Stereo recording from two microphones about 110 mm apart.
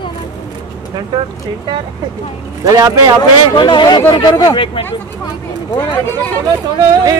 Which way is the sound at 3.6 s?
45° left (ahead or behind).